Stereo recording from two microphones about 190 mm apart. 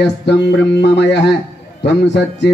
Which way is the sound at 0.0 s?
60° left (ahead or behind).